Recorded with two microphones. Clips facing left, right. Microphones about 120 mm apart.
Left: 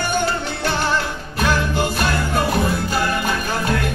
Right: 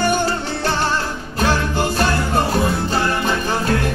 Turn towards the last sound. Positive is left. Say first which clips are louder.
# right 2 dB
turn(degrees=-30)  # may be behind; listen again after turning